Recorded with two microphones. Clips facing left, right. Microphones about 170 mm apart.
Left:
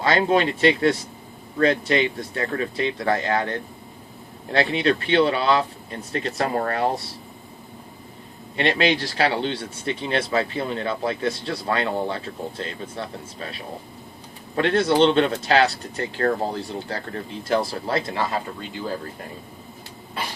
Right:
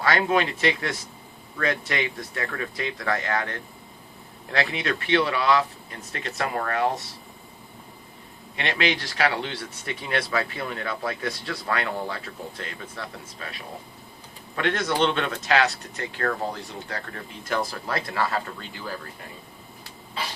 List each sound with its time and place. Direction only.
0.0 s speech: 25° left (ahead or behind)
8.5 s speech: 30° left (ahead or behind)